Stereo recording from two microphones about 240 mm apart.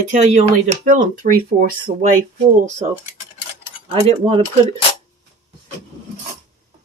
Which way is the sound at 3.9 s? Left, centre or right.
Right.